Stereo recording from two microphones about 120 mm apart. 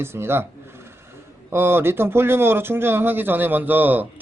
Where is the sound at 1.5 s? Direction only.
20° right (ahead or behind).